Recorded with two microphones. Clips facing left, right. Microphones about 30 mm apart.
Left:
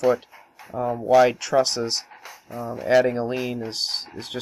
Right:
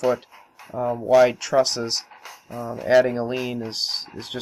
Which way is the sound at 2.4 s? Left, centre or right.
Right.